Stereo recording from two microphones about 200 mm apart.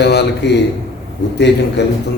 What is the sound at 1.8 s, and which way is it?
Speech, 60° left (ahead or behind).